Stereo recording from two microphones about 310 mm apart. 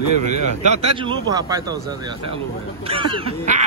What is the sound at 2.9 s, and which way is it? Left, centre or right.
Speech, centre.